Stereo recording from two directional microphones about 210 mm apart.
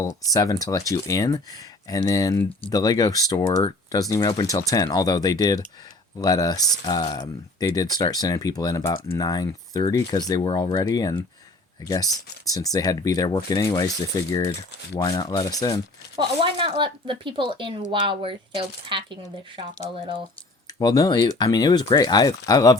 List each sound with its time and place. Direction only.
0.0 s speech: 15° left (ahead or behind)
14.9 s speech: 15° left (ahead or behind)
16.1 s speech: 25° right (ahead or behind)
20.7 s speech: 20° left (ahead or behind)